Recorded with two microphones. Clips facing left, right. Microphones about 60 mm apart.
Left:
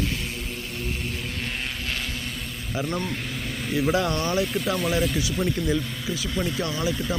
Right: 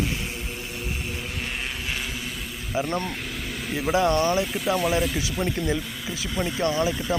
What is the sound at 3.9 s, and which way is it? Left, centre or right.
Speech, centre.